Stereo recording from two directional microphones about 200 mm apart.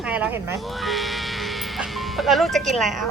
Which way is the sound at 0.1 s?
10° right (ahead or behind).